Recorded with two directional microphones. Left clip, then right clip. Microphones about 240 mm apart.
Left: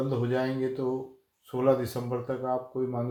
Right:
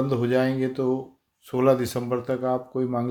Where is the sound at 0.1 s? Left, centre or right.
Right.